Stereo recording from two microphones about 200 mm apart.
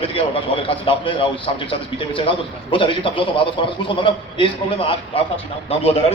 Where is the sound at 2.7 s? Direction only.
25° left (ahead or behind).